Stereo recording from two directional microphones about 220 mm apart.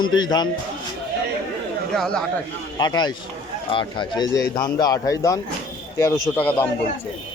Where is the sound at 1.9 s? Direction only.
5° left (ahead or behind).